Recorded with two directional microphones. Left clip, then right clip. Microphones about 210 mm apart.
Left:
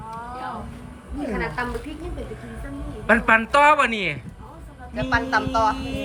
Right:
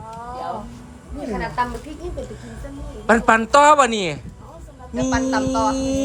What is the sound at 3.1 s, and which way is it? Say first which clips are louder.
A man's voice: right 2 dB; 10° right (ahead or behind).